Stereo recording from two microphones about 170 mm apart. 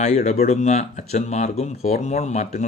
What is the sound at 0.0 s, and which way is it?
Speech, 40° left (ahead or behind).